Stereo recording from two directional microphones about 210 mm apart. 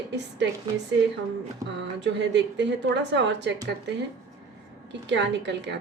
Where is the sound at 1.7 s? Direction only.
55° right (ahead or behind).